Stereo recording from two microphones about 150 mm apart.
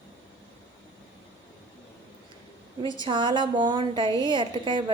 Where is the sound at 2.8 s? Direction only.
30° right (ahead or behind).